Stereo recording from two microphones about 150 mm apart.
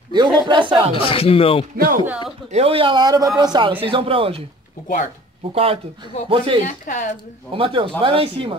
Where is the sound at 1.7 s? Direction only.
75° right (ahead or behind).